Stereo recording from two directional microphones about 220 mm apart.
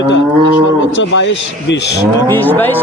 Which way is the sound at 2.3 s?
10° left (ahead or behind).